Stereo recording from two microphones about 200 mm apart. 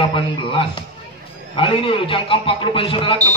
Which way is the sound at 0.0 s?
25° left (ahead or behind).